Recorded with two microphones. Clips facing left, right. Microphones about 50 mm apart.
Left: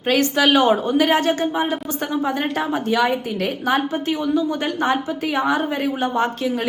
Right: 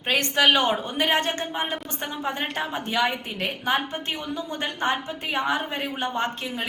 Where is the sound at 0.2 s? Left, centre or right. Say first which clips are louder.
Left 1 dB; right.